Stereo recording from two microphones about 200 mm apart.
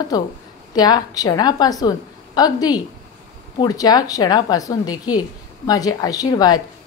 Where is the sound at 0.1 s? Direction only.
20° left (ahead or behind).